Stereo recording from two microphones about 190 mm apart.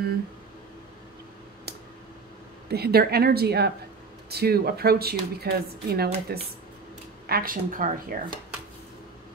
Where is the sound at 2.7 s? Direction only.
55° right (ahead or behind).